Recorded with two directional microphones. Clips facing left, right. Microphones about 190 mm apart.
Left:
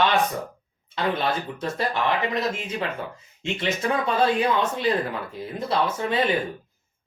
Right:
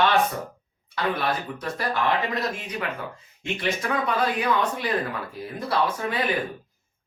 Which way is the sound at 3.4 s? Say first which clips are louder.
Left 1 dB; 25° left (ahead or behind).